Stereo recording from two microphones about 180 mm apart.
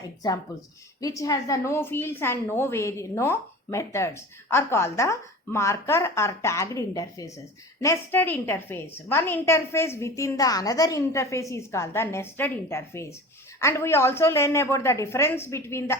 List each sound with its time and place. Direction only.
1.0 s a woman's voice: 20° left (ahead or behind)